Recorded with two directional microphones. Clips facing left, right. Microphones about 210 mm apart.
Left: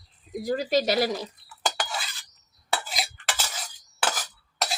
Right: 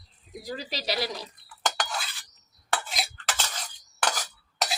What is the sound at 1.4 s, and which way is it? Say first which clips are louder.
Stir: right 3 dB; 5° left (ahead or behind).